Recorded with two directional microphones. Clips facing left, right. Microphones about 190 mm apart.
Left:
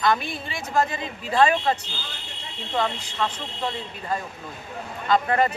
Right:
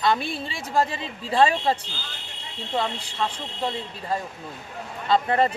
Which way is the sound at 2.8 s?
30° right (ahead or behind).